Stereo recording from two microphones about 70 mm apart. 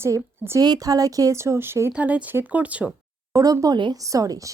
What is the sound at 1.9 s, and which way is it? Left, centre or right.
Speech, centre.